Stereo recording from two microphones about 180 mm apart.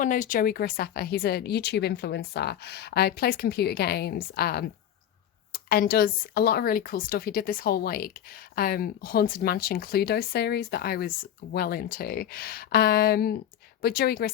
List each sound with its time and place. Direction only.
0.0 s speech: 45° left (ahead or behind)